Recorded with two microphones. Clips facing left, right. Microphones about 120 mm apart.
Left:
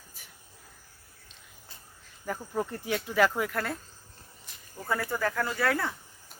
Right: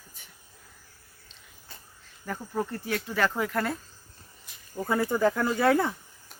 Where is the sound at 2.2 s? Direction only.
5° left (ahead or behind).